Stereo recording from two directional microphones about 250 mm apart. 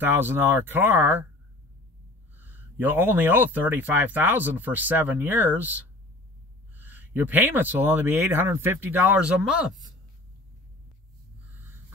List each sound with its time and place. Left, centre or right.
0.0 s speech: centre
2.3 s speech: centre